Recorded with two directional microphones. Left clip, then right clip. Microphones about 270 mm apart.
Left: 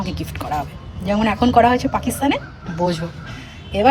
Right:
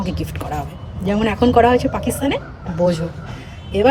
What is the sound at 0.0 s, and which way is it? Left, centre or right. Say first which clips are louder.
A woman's voice: right 1 dB; centre.